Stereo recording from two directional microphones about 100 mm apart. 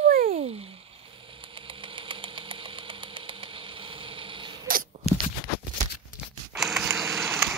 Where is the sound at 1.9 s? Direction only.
60° right (ahead or behind).